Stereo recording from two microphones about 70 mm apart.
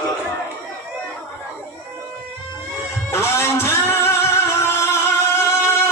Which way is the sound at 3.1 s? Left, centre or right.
Left.